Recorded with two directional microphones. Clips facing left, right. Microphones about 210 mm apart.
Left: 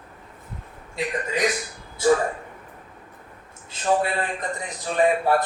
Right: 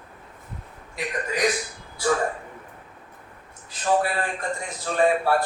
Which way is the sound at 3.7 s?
20° left (ahead or behind).